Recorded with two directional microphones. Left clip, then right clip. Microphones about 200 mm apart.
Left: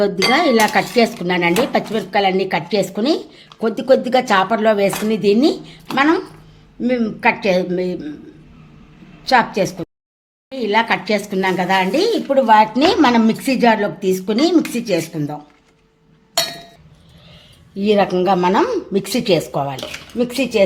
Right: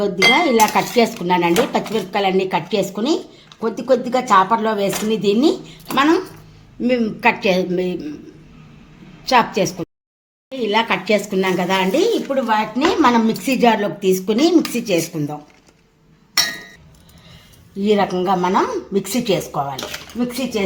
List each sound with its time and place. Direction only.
0.0 s dishes: 20° left (ahead or behind)
6.8 s a woman's voice: 10° left (ahead or behind)
9.2 s a woman's voice: 10° left (ahead or behind)
12.3 s a woman's voice: 35° left (ahead or behind); by 15.4 s 10° left (ahead or behind)
17.7 s speech: 30° left (ahead or behind)